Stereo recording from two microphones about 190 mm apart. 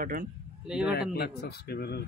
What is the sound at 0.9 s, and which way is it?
A man's voice, 55° left (ahead or behind).